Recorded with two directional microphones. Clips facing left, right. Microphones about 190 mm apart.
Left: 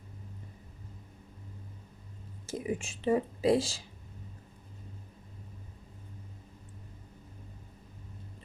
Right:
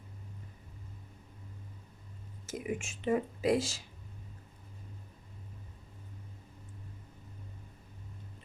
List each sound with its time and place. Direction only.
2.5 s speech: 30° left (ahead or behind)